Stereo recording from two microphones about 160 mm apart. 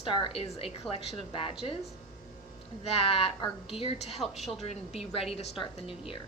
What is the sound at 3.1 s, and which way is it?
A woman's voice, 35° left (ahead or behind).